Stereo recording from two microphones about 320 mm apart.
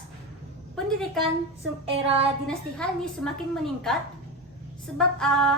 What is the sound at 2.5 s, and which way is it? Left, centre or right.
A woman's voice, centre.